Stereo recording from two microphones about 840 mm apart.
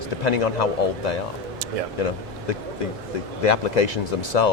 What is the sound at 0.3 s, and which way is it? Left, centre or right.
Speech, left.